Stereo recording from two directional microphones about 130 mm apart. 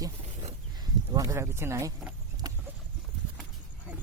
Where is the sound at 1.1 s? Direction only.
25° right (ahead or behind).